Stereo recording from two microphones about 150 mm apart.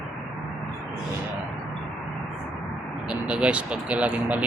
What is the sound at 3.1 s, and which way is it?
Speech, 5° right (ahead or behind).